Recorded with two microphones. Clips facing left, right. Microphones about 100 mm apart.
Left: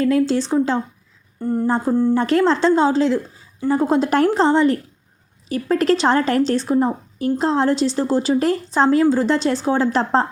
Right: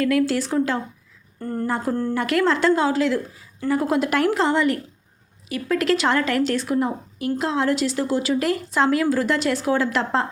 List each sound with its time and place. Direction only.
0.0 s a woman's voice: 30° left (ahead or behind)
1.4 s speech: 15° left (ahead or behind)
1.6 s a woman's voice: 30° left (ahead or behind)
1.9 s a woman's voice: 15° left (ahead or behind)
2.1 s a woman's voice: 30° left (ahead or behind)